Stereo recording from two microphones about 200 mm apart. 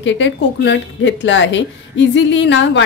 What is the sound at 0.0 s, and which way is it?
A woman's voice, 65° left (ahead or behind).